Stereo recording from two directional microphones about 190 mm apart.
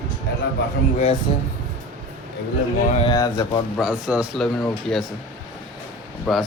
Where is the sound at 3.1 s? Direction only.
20° left (ahead or behind).